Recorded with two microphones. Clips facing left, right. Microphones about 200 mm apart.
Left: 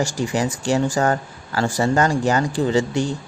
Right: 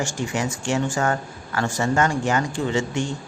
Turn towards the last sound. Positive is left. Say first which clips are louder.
# left 4 dB
turn(degrees=35)  # may be behind; listen again after turning